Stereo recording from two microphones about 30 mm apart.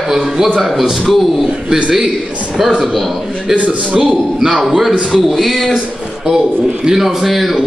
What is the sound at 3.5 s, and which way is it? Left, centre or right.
Speech, right.